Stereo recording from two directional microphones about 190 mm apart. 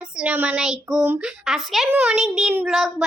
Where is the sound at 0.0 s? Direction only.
5° right (ahead or behind).